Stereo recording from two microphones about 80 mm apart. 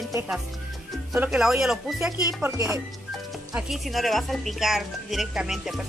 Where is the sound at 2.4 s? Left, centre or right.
Right.